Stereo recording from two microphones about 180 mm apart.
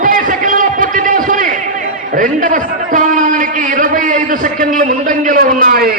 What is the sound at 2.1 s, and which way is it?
A man's voice, 50° right (ahead or behind).